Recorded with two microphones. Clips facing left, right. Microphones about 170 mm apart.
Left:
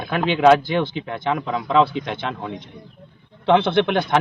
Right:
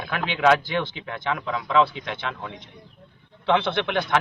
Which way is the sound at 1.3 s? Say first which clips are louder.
Left 3 dB; 30° left (ahead or behind).